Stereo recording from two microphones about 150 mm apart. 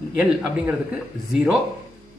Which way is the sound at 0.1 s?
10° right (ahead or behind).